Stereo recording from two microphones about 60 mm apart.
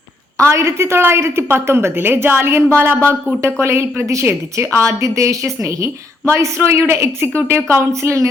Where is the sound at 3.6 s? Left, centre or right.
Right.